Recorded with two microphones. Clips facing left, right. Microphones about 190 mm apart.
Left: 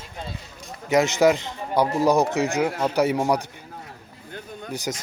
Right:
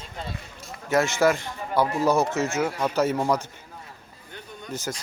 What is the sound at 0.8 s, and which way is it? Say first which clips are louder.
A man's voice: left 3 dB; 15° left (ahead or behind).